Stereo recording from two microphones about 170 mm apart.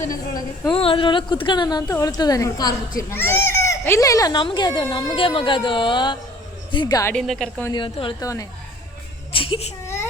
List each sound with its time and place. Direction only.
0.0 s a woman's voice: 20° left (ahead or behind)
0.8 s a child's voice: 35° left (ahead or behind)
7.1 s a woman's voice: 5° left (ahead or behind)
7.7 s a child's voice: 30° left (ahead or behind)
9.3 s a sound: 30° left (ahead or behind)